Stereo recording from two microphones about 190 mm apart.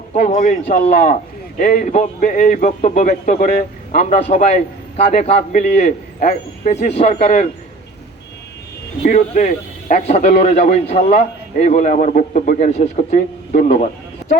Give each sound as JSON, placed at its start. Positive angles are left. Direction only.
{"t": 0.1, "sound": "a man's voice", "side_deg": 40}
{"t": 9.0, "sound": "a man's voice", "side_deg": 40}